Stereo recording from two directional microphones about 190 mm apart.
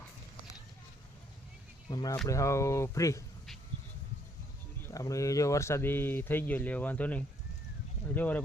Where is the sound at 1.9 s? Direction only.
20° left (ahead or behind).